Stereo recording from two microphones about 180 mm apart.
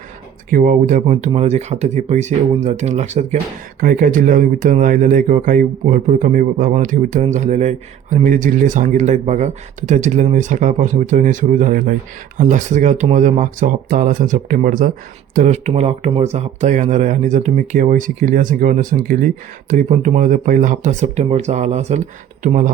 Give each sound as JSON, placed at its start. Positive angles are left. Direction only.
{"t": 0.5, "sound": "speech", "side_deg": -45}
{"t": 3.8, "sound": "speech", "side_deg": -50}